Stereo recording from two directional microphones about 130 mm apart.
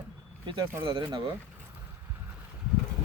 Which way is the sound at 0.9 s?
35° right (ahead or behind).